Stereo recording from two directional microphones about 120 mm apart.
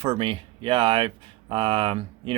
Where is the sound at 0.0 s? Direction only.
50° right (ahead or behind).